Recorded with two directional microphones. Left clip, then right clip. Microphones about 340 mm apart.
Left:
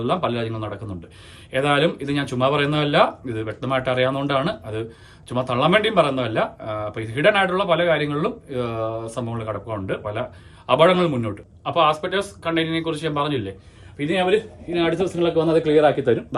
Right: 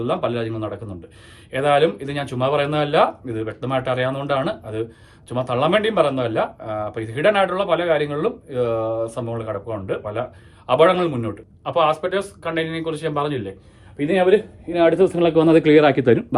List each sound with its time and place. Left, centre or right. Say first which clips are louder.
0.0 s a man's voice: even; centre